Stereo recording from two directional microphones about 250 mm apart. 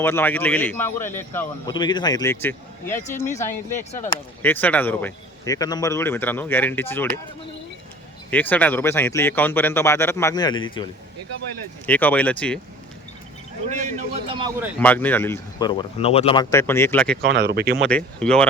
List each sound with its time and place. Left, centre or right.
0.0 s speech: centre
3.2 s speech: left
4.4 s speech: centre
8.3 s speech: centre
11.9 s speech: centre
13.7 s a man's voice: right
14.8 s speech: centre
17.2 s speech: right
17.8 s speech: centre